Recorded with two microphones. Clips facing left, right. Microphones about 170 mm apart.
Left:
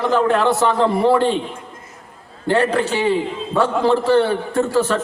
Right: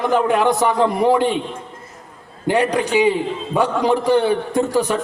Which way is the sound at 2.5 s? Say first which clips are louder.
Even; 15° right (ahead or behind).